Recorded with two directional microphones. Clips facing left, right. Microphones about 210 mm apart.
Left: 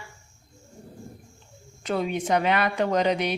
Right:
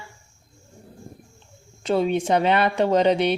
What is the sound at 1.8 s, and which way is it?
Speech, 30° right (ahead or behind).